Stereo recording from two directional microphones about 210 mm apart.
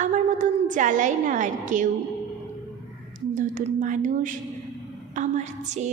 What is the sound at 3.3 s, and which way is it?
A woman's voice, 40° right (ahead or behind).